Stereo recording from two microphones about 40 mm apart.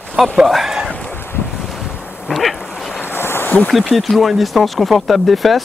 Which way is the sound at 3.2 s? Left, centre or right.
Left.